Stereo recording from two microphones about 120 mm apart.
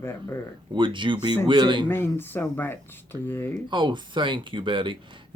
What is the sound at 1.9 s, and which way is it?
Speech, 20° left (ahead or behind).